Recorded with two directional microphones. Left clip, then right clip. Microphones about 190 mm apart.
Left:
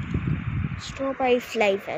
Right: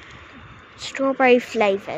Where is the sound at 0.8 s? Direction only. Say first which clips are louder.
Right 7 dB; 40° right (ahead or behind).